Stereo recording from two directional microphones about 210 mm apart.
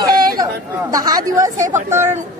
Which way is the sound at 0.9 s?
15° right (ahead or behind).